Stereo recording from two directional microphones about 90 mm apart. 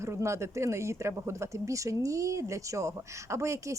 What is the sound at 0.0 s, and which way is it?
A woman's voice, 30° right (ahead or behind).